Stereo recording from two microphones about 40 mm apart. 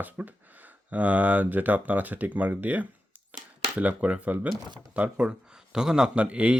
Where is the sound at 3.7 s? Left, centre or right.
Right.